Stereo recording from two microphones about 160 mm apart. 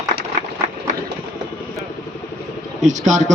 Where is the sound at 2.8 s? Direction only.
50° right (ahead or behind).